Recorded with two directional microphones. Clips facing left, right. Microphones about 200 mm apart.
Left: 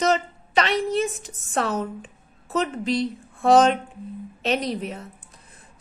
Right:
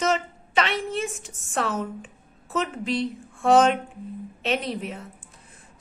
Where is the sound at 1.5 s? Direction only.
35° left (ahead or behind).